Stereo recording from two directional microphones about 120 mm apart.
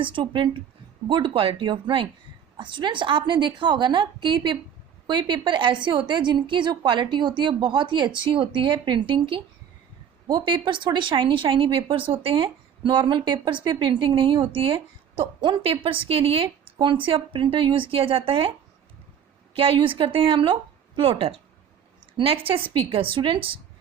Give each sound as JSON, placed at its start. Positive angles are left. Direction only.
{"t": 0.0, "sound": "a woman's voice", "side_deg": -45}
{"t": 19.5, "sound": "speech", "side_deg": -50}